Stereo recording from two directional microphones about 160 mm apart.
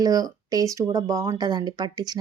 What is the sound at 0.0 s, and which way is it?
A woman's voice, 20° right (ahead or behind).